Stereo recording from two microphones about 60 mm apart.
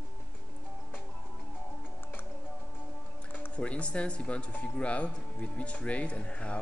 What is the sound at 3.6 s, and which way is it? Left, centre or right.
Speech, left.